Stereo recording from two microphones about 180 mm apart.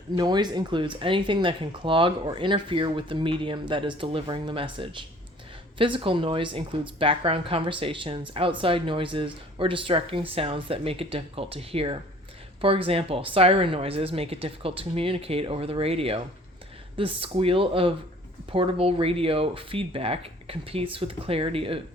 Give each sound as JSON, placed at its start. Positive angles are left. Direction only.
{"t": 0.2, "sound": "speech", "side_deg": -25}